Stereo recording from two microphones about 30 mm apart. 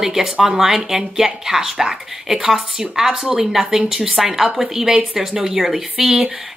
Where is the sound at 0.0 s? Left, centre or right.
Centre.